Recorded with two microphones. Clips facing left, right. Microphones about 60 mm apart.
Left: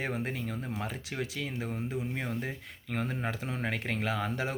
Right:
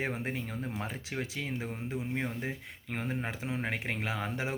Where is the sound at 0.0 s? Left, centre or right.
Right.